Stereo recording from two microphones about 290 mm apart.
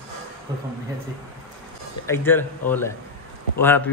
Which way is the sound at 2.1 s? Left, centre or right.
Centre.